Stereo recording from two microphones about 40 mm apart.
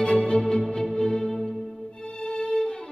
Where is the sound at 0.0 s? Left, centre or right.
Left.